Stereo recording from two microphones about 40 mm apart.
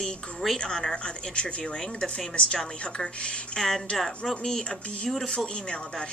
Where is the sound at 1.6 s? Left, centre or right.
Centre.